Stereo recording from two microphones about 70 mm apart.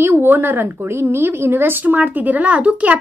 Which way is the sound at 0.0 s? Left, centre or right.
Right.